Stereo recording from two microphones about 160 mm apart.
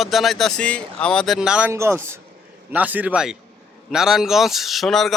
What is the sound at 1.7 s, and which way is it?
A man's voice, 15° right (ahead or behind).